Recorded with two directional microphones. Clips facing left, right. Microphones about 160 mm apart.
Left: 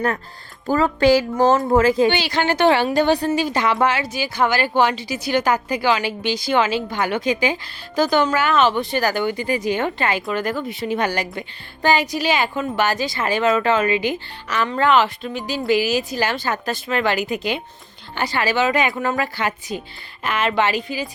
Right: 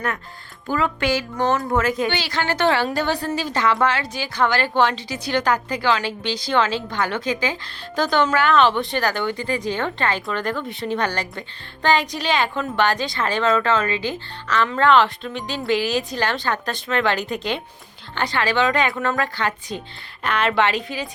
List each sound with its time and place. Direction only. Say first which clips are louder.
0.7 s speech: left 6 dB; 35° left (ahead or behind)
2.0 s a woman's voice: left 4 dB; 15° left (ahead or behind)
7.9 s a woman's voice: left 2 dB; 5° left (ahead or behind)